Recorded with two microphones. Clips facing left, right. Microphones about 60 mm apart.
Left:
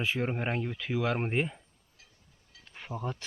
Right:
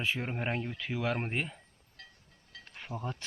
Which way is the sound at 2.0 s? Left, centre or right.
Right.